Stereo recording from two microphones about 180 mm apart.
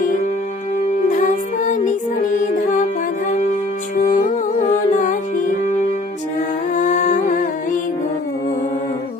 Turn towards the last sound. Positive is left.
turn(degrees=45)  # may be behind; listen again after turning